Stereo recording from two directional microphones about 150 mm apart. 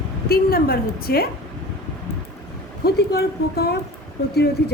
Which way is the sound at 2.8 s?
90° left.